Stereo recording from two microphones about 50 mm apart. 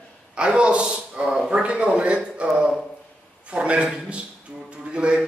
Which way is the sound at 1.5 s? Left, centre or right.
Right.